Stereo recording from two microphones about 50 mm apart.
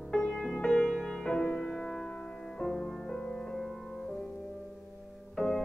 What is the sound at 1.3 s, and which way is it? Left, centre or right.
Music, left.